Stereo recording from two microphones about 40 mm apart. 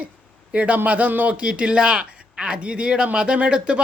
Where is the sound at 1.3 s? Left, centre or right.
Right.